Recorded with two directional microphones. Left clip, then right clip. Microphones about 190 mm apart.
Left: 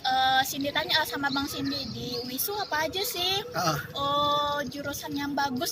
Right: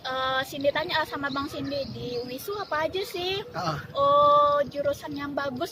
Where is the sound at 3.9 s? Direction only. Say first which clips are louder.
Right 9 dB; 45° right (ahead or behind).